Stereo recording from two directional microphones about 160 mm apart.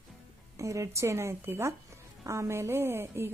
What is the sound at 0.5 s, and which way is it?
A woman's voice, 20° right (ahead or behind).